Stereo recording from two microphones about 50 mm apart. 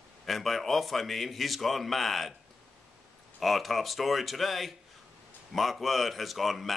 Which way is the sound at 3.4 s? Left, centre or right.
Centre.